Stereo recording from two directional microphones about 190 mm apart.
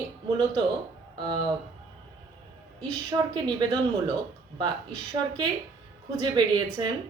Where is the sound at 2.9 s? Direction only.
20° right (ahead or behind).